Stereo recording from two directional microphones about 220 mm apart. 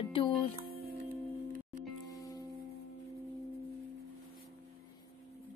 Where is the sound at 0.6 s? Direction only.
45° right (ahead or behind).